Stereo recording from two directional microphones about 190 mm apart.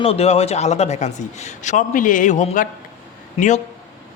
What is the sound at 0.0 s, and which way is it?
A man's voice, 30° left (ahead or behind).